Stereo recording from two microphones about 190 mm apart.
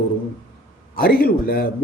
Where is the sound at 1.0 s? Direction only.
50° left (ahead or behind).